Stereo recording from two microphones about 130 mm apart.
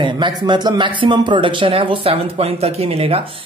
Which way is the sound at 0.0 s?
35° right (ahead or behind).